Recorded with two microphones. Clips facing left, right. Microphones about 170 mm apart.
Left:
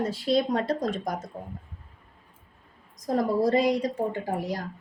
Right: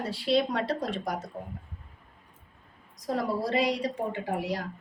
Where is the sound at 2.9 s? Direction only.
45° left (ahead or behind).